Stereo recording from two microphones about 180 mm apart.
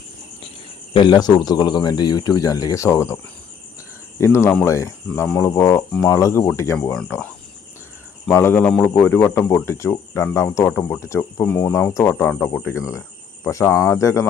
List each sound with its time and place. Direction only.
0.9 s speech: 25° left (ahead or behind)
4.2 s speech: 15° left (ahead or behind)
8.3 s speech: 10° left (ahead or behind)